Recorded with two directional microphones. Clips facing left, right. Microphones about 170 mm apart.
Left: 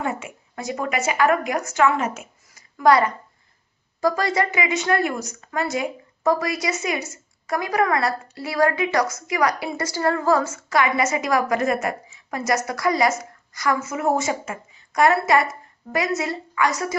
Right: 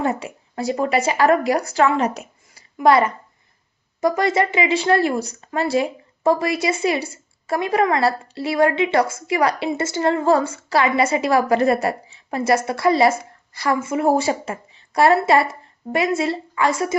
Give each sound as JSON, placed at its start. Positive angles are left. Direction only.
{"t": 0.0, "sound": "a woman's voice", "side_deg": -35}
{"t": 2.7, "sound": "speech", "side_deg": -25}